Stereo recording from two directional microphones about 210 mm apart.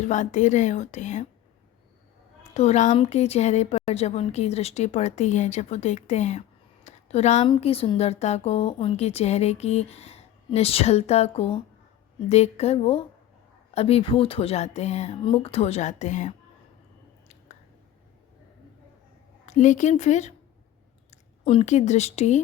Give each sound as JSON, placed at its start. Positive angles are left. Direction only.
{"t": 0.0, "sound": "a woman's voice", "side_deg": 35}
{"t": 2.4, "sound": "a woman's voice", "side_deg": 30}
{"t": 19.5, "sound": "a woman's voice", "side_deg": 35}